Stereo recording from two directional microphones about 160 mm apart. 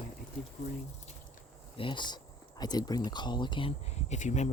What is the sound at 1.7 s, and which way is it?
Speech, 30° left (ahead or behind).